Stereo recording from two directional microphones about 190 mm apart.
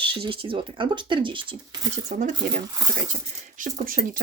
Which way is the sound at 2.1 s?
40° right (ahead or behind).